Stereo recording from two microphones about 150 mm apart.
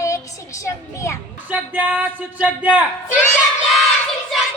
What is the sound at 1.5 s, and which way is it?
A man's voice, 10° right (ahead or behind).